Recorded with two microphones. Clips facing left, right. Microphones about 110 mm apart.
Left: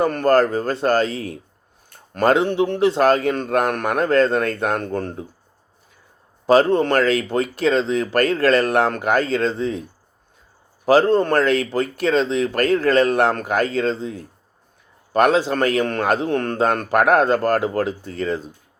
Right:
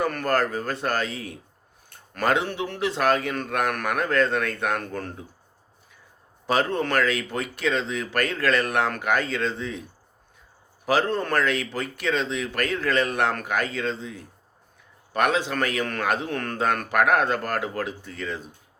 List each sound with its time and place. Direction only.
0.0 s speech: 30° left (ahead or behind)
6.5 s speech: 35° left (ahead or behind)
10.8 s speech: 35° left (ahead or behind)